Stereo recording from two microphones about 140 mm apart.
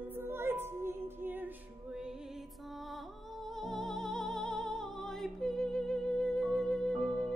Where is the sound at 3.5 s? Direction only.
Centre (ahead or behind).